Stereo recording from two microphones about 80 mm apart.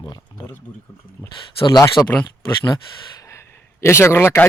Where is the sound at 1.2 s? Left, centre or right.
Left.